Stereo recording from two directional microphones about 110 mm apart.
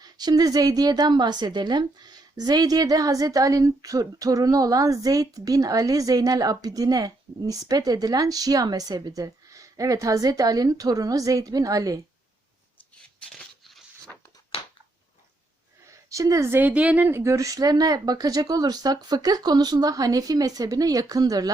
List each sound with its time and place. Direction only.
0.0 s a woman's voice: 40° right (ahead or behind)
15.9 s a woman's voice: 30° right (ahead or behind)